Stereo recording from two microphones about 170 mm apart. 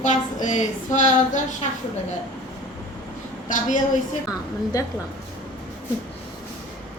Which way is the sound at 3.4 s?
45° left (ahead or behind).